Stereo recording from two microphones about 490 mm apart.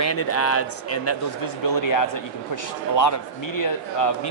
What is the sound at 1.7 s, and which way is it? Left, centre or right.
A man's voice, left.